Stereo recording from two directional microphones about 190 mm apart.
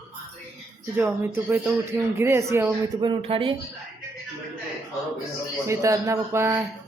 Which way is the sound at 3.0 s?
25° right (ahead or behind).